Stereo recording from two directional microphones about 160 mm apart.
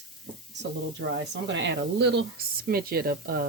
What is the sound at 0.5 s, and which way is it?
Speech, 90° right.